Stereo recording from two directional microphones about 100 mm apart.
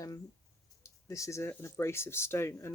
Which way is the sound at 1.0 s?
30° left (ahead or behind).